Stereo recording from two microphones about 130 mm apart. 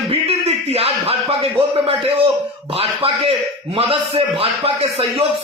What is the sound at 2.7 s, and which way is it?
A man's voice, 45° right (ahead or behind).